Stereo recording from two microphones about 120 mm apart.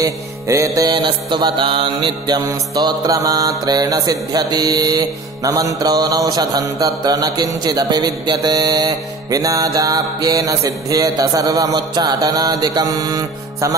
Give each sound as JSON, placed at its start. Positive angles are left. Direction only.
{"t": 0.0, "sound": "music", "side_deg": -25}